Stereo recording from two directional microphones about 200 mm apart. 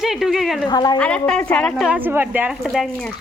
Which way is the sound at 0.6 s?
20° left (ahead or behind).